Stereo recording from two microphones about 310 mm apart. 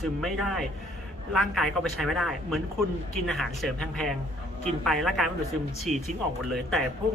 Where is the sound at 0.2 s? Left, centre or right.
Centre.